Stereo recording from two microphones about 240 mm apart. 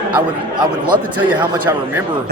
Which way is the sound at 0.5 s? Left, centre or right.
Centre.